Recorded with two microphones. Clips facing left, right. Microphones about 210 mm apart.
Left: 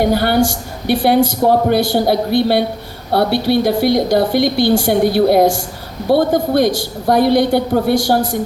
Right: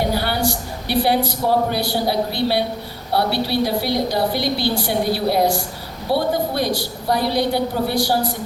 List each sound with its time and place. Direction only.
0.0 s a woman's voice: 50° left (ahead or behind)